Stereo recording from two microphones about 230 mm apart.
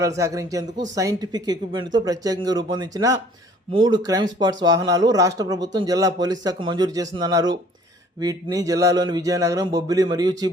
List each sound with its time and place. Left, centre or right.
0.2 s speech: centre